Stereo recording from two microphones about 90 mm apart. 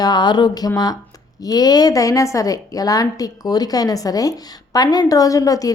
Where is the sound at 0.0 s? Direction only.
50° left (ahead or behind).